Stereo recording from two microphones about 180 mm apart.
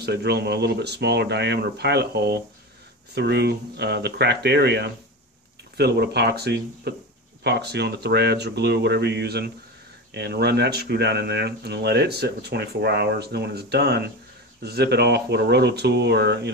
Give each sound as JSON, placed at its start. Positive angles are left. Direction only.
{"t": 0.0, "sound": "speech", "side_deg": -65}